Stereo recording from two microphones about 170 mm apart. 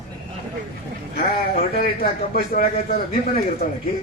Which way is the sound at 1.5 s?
60° left (ahead or behind).